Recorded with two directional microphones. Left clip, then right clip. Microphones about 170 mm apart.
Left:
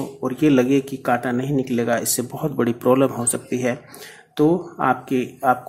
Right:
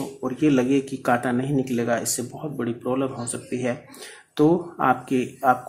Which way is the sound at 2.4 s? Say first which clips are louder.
Left 10 dB; 25° left (ahead or behind).